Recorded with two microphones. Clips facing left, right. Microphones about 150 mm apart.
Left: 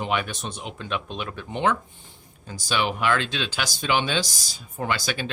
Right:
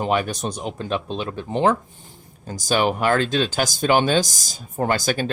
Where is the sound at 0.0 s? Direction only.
40° right (ahead or behind).